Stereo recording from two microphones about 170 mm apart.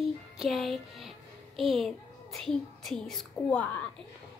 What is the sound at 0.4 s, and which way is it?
A child's voice, centre (ahead or behind).